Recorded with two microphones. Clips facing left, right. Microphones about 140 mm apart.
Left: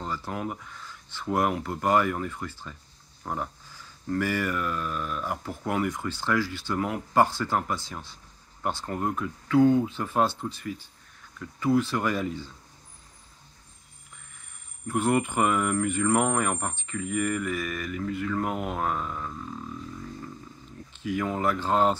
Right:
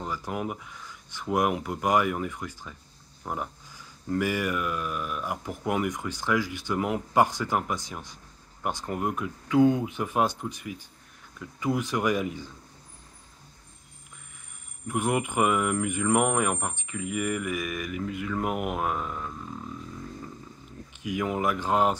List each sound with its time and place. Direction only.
0.0 s speech: 10° right (ahead or behind)
14.9 s speech: 15° right (ahead or behind)
20.9 s speech: 15° right (ahead or behind)